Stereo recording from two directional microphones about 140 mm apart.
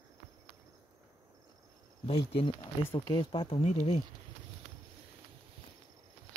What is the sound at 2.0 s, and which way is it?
Speech, 40° left (ahead or behind).